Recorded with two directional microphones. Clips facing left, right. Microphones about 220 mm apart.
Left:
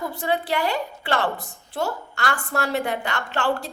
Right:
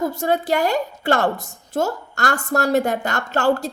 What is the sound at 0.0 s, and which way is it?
A woman's voice, 45° right (ahead or behind).